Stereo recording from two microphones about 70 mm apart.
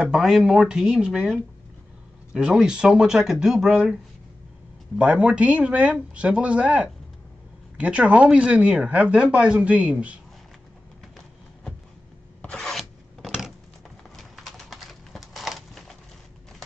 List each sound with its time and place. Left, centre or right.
0.0 s speech: centre
2.3 s speech: centre
4.9 s speech: centre
12.4 s filing: centre
14.1 s a sound: centre